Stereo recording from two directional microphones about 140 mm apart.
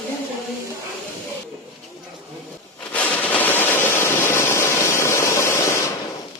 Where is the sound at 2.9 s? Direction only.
10° left (ahead or behind).